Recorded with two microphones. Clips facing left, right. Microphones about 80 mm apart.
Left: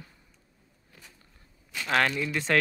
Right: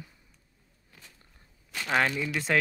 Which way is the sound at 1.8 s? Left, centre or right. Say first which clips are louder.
Left 1 dB; centre.